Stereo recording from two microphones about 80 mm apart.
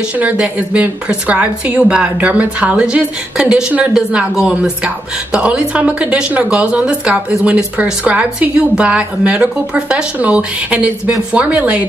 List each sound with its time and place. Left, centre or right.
0.2 s a woman's voice: centre